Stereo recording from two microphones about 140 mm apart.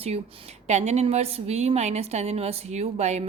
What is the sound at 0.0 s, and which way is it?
A woman's voice, 45° right (ahead or behind).